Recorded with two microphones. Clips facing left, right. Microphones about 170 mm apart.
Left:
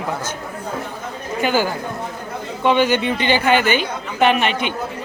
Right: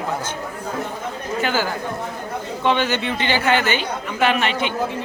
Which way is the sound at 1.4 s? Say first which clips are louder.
Left 4 dB; 15° left (ahead or behind).